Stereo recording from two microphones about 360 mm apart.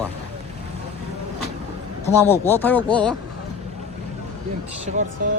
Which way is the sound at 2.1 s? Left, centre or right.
Centre.